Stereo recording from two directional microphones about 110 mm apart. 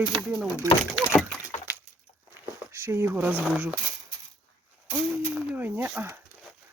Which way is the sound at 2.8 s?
25° right (ahead or behind).